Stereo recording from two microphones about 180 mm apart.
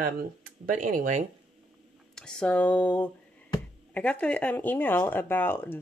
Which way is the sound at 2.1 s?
5° left (ahead or behind).